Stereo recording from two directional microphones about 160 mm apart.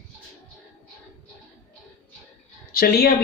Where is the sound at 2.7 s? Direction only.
75° left (ahead or behind).